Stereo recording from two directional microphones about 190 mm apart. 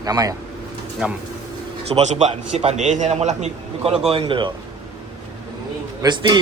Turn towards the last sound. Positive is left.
turn(degrees=-25)  # may be behind; listen again after turning